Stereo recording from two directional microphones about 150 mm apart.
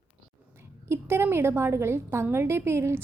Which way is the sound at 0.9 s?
15° right (ahead or behind).